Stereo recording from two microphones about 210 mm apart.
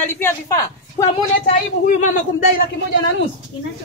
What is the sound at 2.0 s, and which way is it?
Speech, 40° left (ahead or behind).